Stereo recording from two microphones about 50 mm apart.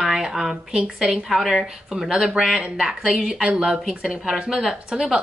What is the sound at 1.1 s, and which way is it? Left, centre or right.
Speech, centre.